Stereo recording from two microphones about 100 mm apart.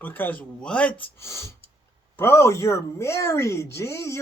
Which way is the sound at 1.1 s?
30° left (ahead or behind).